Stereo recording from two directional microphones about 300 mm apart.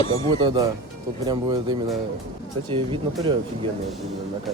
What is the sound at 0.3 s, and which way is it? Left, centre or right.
Speech, centre.